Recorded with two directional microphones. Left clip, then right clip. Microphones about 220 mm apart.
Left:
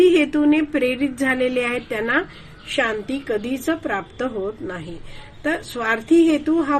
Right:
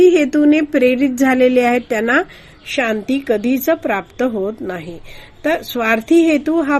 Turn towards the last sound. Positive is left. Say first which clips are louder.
# right 4 dB
turn(degrees=-45)  # may be behind; listen again after turning